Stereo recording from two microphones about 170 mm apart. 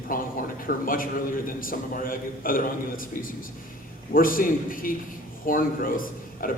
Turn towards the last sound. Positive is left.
turn(degrees=55)  # may be behind; listen again after turning